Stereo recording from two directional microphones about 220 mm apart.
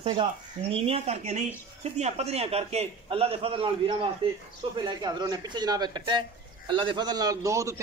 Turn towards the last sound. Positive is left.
turn(degrees=-15)  # may be behind; listen again after turning